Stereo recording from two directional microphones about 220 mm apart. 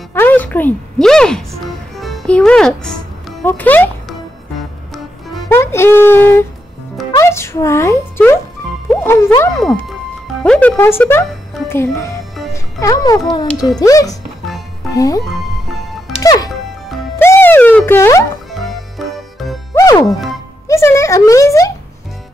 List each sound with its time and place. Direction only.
0.1 s music: 10° left (ahead or behind)
4.9 s music: centre (ahead or behind)
5.5 s speech: 10° left (ahead or behind)
7.2 s a sound: 10° left (ahead or behind)
8.9 s speech: 10° left (ahead or behind)
9.6 s speech: centre (ahead or behind); by 16.4 s 15° left (ahead or behind)
17.2 s music: 10° left (ahead or behind)
18.5 s music: centre (ahead or behind)
19.7 s music: 15° left (ahead or behind)
20.1 s music: centre (ahead or behind)
20.6 s speech: 15° left (ahead or behind)